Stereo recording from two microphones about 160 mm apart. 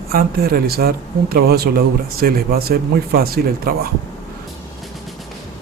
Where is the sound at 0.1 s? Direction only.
65° right (ahead or behind).